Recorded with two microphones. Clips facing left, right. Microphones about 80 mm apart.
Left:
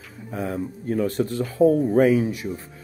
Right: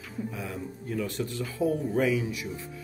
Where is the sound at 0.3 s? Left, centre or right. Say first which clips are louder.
Left 8 dB; left.